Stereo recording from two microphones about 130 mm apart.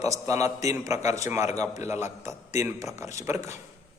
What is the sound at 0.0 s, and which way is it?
A man's voice, 25° right (ahead or behind).